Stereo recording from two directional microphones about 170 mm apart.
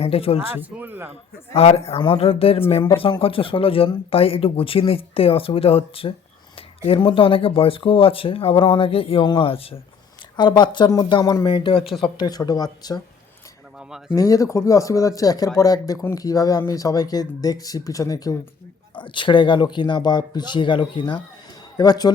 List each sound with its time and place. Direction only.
0.0 s speech: 35° left (ahead or behind)
0.5 s a man's voice: 10° right (ahead or behind)
1.5 s speech: 35° left (ahead or behind)
13.7 s speech: 5° right (ahead or behind)
14.2 s speech: 20° left (ahead or behind)